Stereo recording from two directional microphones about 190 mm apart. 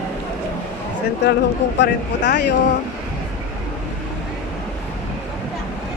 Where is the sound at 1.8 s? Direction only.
65° left (ahead or behind).